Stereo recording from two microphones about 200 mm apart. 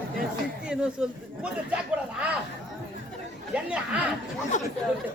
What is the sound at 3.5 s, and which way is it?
Speech, 5° right (ahead or behind).